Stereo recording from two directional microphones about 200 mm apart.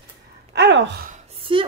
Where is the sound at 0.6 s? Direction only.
65° right (ahead or behind).